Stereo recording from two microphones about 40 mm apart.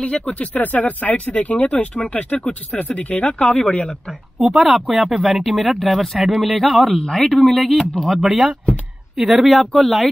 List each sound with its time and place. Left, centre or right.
0.0 s speech: left
4.5 s speech: centre
7.0 s speech: centre
7.3 s speech: centre
8.2 s speech: centre